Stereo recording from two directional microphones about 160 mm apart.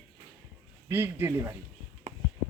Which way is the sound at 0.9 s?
15° right (ahead or behind).